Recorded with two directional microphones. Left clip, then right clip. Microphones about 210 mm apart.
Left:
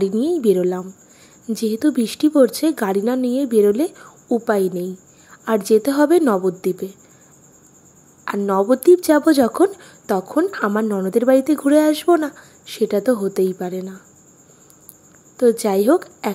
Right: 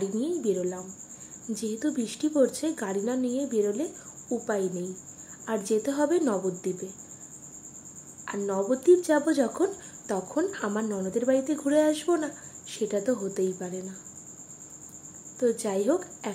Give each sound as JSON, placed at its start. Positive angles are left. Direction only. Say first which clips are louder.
{"t": 0.0, "sound": "speech", "louder": "left 11 dB", "side_deg": 45}
{"t": 8.3, "sound": "speech", "louder": "left 11 dB", "side_deg": 45}
{"t": 15.3, "sound": "speech", "louder": "left 11 dB", "side_deg": 45}